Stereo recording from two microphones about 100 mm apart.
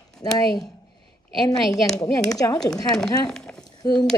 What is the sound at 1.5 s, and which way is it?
Speech, 5° left (ahead or behind).